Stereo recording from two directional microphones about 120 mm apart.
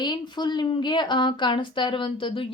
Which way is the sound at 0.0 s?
40° left (ahead or behind).